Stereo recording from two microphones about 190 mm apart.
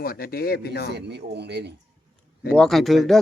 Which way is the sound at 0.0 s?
55° left (ahead or behind).